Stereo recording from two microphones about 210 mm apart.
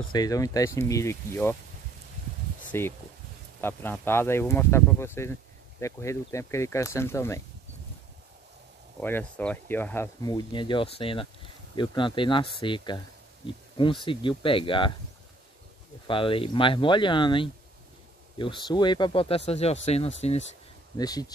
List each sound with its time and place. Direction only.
0.1 s speech: 15° left (ahead or behind)
2.7 s speech: 10° left (ahead or behind)
9.0 s speech: 10° left (ahead or behind); by 15.0 s 25° left (ahead or behind)
16.1 s speech: 25° left (ahead or behind)
21.0 s speech: 20° left (ahead or behind)